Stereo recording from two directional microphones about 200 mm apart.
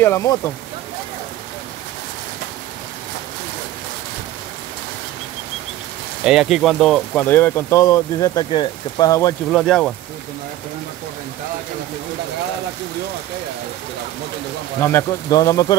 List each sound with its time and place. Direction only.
0.0 s speech: 15° left (ahead or behind)
6.2 s speech: centre (ahead or behind); by 9.3 s 15° left (ahead or behind)
9.5 s speech: 5° left (ahead or behind)
14.8 s speech: 15° left (ahead or behind)